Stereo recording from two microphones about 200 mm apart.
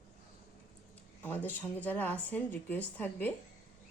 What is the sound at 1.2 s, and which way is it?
Speech, 10° left (ahead or behind).